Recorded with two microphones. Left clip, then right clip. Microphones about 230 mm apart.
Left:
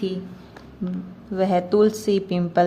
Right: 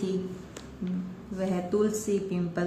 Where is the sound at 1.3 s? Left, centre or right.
Left.